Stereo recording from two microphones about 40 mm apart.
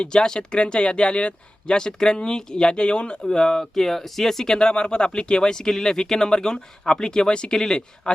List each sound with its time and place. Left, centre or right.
0.0 s speech: centre
3.2 s speech: centre